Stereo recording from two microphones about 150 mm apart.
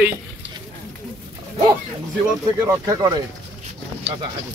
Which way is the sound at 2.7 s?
25° right (ahead or behind).